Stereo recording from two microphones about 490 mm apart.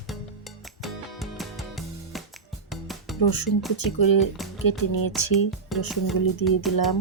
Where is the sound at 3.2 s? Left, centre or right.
Left.